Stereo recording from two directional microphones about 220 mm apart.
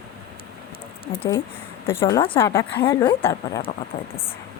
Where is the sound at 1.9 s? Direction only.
15° left (ahead or behind).